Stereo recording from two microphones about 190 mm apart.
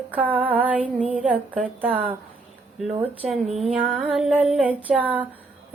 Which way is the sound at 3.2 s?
Centre (ahead or behind).